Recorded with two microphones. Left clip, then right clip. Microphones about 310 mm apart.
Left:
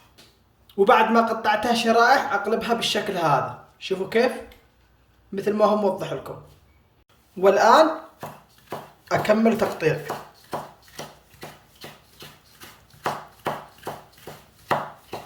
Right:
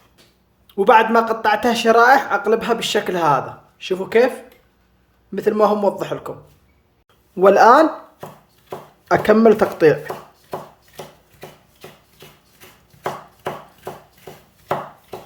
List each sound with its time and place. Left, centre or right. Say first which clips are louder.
0.7 s speech: right 4 dB; centre
5.3 s speech: right 4 dB; centre
7.3 s speech: right 5 dB; centre
9.0 s speech: right 7 dB; centre